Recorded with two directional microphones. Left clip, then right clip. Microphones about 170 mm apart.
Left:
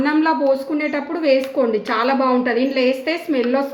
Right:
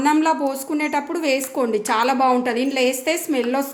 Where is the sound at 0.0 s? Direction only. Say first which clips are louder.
Even; 70° right (ahead or behind).